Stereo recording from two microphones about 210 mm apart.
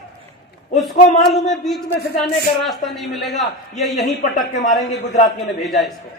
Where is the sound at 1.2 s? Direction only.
Centre (ahead or behind).